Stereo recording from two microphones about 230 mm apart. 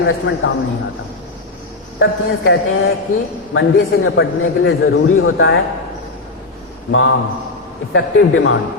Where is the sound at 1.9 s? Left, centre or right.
Left.